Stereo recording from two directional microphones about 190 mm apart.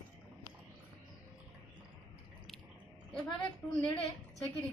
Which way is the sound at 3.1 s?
5° left (ahead or behind).